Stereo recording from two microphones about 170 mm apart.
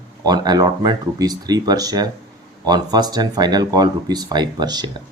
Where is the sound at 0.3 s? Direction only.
25° right (ahead or behind).